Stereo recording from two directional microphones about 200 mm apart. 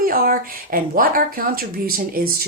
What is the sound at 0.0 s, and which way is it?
Speech, 45° right (ahead or behind).